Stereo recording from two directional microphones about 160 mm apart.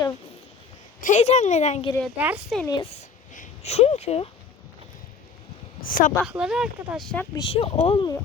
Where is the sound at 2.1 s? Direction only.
10° right (ahead or behind).